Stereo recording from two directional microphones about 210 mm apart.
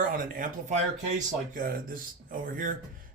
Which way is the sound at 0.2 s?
40° right (ahead or behind).